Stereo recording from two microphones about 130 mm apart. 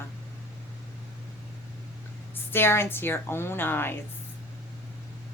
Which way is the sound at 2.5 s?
20° left (ahead or behind).